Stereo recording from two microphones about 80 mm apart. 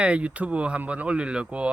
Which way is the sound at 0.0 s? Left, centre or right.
Centre.